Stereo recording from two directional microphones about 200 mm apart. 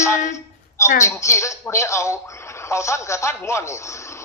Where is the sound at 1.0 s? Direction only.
15° left (ahead or behind).